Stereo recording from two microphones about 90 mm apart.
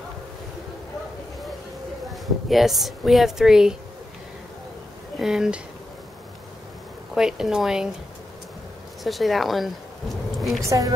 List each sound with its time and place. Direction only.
2.5 s a woman's voice: centre (ahead or behind)
5.2 s speech: 5° right (ahead or behind)
7.2 s speech: 5° right (ahead or behind)
9.0 s speech: centre (ahead or behind)
10.6 s a woman's voice: 40° right (ahead or behind)